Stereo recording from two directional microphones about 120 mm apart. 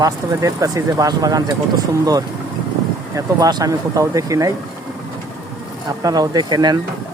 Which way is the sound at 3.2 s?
30° right (ahead or behind).